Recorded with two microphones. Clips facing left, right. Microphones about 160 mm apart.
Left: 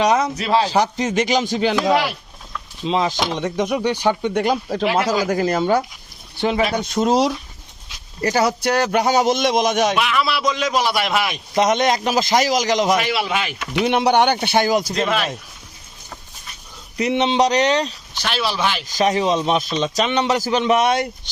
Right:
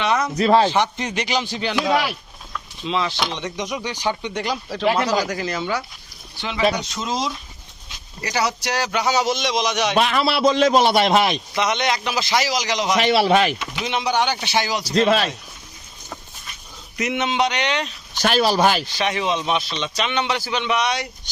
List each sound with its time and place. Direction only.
0.3 s a man's voice: 40° right (ahead or behind)
0.7 s speech: 40° left (ahead or behind); by 7.3 s 65° left (ahead or behind)
8.2 s speech: 50° left (ahead or behind)
9.9 s a man's voice: 35° right (ahead or behind)
11.5 s speech: 45° left (ahead or behind)
13.0 s a man's voice: 30° right (ahead or behind)
13.6 s speech: 60° left (ahead or behind)
15.0 s a man's voice: 30° right (ahead or behind)
17.0 s speech: 30° left (ahead or behind)
18.2 s speech: 45° right (ahead or behind)
18.9 s speech: 40° left (ahead or behind)